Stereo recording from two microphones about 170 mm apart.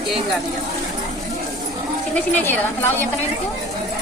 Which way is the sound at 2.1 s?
10° left (ahead or behind).